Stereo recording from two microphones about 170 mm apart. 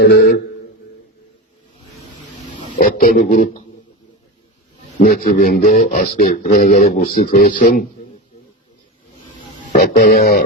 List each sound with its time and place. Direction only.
0.2 s speech: 60° left (ahead or behind)
2.7 s speech: 55° left (ahead or behind)
4.9 s speech: 55° left (ahead or behind)
9.7 s speech: 60° left (ahead or behind)